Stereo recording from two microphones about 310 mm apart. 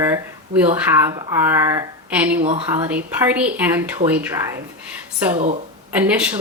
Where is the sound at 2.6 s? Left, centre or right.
Centre.